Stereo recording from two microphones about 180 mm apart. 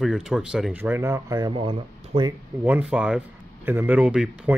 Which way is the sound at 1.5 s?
30° right (ahead or behind).